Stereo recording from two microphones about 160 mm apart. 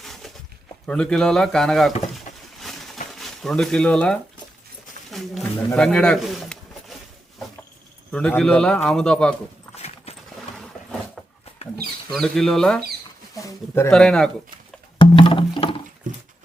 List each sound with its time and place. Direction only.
0.0 s a sound: centre (ahead or behind)
0.9 s speech: 5° left (ahead or behind)
2.1 s a sound: centre (ahead or behind)
3.2 s speech: centre (ahead or behind)
5.1 s a sound: centre (ahead or behind)
8.1 s speech: 5° left (ahead or behind)
9.7 s clip-clop: 40° left (ahead or behind)
12.1 s speech: centre (ahead or behind)
13.3 s a sound: 20° left (ahead or behind)
13.9 s speech: 5° left (ahead or behind)
14.9 s wood block: 35° left (ahead or behind)
16.1 s pig: 55° right (ahead or behind)